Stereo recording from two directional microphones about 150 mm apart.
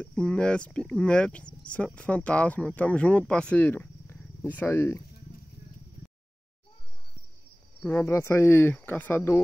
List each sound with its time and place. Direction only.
0.0 s speech: 5° left (ahead or behind)
7.8 s speech: 10° left (ahead or behind)